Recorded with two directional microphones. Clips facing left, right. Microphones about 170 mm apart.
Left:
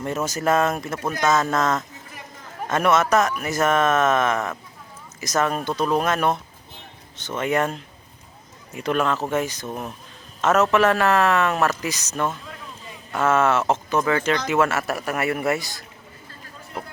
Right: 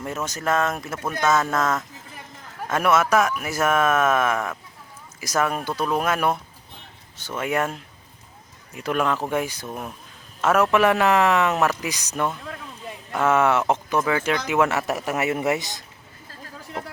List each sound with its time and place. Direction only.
0.2 s a man's voice: 5° left (ahead or behind); by 15.8 s 20° right (ahead or behind)